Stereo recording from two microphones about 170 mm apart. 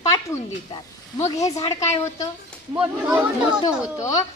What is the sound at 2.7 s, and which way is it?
Speech, 5° right (ahead or behind).